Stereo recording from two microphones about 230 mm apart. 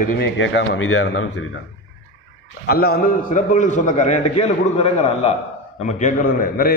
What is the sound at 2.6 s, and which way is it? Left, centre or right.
A man's voice, left.